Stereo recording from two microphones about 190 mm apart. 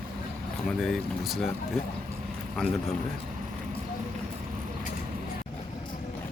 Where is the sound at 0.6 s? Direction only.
Centre (ahead or behind).